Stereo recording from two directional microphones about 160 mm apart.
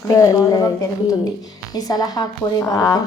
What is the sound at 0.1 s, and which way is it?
A woman's voice, 20° left (ahead or behind).